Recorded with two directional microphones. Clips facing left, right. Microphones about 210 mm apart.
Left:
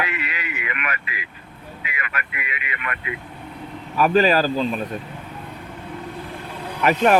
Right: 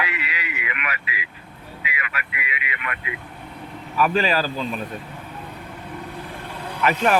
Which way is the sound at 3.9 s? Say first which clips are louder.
Left 4 dB; 40° left (ahead or behind).